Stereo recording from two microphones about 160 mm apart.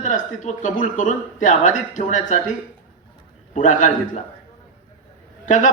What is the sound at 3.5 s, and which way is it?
Speech, 50° left (ahead or behind).